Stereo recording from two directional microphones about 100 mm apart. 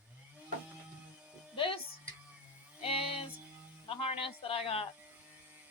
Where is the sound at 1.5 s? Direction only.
65° left (ahead or behind).